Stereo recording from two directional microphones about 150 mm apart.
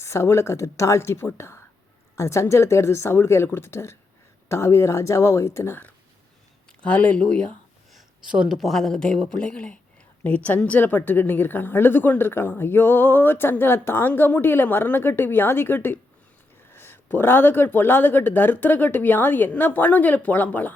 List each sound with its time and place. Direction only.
0.0 s a woman's voice: 20° left (ahead or behind)